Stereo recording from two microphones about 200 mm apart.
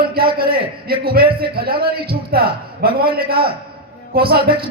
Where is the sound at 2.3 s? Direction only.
50° right (ahead or behind).